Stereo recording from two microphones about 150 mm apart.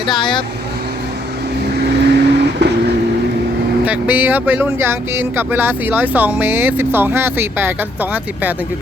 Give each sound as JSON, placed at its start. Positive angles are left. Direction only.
{"t": 0.1, "sound": "speech", "side_deg": 30}
{"t": 1.8, "sound": "vehicle", "side_deg": -90}
{"t": 3.8, "sound": "speech", "side_deg": -10}